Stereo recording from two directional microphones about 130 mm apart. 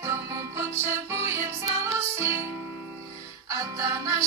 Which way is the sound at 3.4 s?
25° right (ahead or behind).